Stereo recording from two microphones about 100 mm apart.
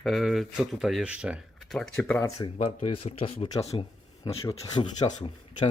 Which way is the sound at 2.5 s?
85° left.